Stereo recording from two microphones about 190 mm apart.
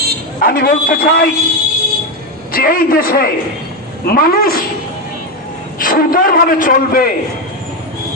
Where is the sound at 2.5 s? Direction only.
50° left (ahead or behind).